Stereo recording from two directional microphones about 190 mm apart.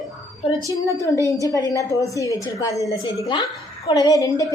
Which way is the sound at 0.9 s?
15° left (ahead or behind).